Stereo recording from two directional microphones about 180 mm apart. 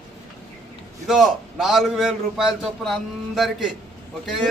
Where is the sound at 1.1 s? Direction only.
Centre (ahead or behind).